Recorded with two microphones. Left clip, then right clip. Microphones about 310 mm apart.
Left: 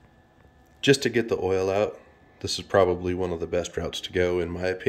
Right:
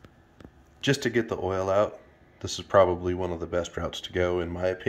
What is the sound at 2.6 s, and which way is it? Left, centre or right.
Speech, centre.